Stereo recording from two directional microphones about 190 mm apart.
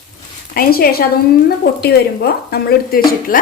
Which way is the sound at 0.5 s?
50° left (ahead or behind).